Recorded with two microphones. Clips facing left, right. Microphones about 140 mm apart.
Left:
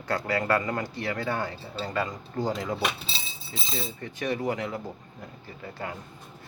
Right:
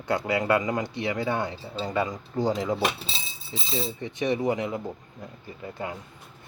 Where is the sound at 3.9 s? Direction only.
20° right (ahead or behind).